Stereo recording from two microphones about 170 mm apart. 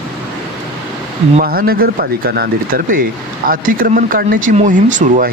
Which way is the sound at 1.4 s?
60° right (ahead or behind).